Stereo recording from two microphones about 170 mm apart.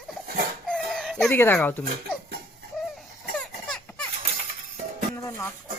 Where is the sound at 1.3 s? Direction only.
15° left (ahead or behind).